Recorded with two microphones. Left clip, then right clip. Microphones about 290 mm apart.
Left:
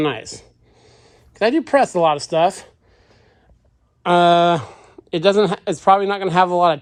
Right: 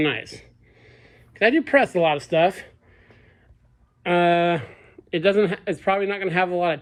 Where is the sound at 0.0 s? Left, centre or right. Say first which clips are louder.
Left 2 dB; centre.